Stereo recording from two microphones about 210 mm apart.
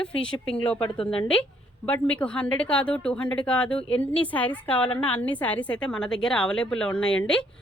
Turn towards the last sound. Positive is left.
turn(degrees=5)  # may be behind; listen again after turning